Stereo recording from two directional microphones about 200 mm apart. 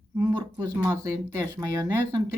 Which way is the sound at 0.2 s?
15° right (ahead or behind).